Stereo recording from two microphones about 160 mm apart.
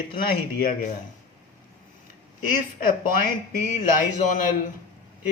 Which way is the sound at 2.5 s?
60° left (ahead or behind).